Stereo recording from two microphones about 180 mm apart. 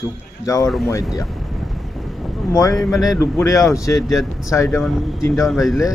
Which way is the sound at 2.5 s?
20° left (ahead or behind).